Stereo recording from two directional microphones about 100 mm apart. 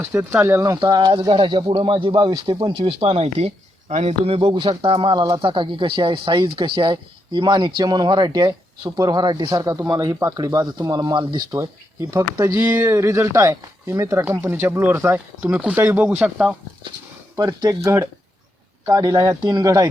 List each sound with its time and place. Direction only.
0.0 s speech: 20° right (ahead or behind)
0.8 s speech: 50° right (ahead or behind)
2.7 s speech: 70° right (ahead or behind); by 3.5 s 90° right
4.4 s speech: 55° right (ahead or behind); by 14.3 s 35° right (ahead or behind)
14.3 s speech: 20° right (ahead or behind)
14.9 s speech: 30° right (ahead or behind)
15.4 s speech: 15° right (ahead or behind)
15.8 s speech: 25° right (ahead or behind)
16.0 s speech: 15° right (ahead or behind)
17.3 s speech: 35° right (ahead or behind)
18.9 s speech: 35° right (ahead or behind)